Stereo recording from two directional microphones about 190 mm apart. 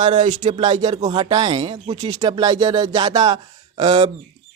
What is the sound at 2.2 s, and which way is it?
A man's voice, 20° right (ahead or behind).